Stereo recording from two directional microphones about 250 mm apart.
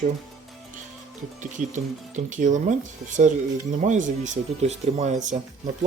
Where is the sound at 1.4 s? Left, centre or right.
Right.